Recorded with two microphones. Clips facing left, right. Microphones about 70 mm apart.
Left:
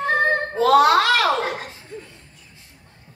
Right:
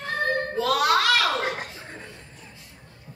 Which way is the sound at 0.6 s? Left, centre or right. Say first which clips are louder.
Left 8 dB; left.